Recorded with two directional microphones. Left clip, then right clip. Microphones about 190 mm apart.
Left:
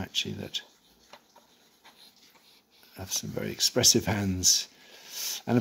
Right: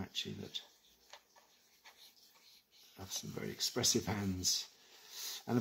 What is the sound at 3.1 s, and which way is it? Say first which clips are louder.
Speech: left 10 dB; 40° left (ahead or behind).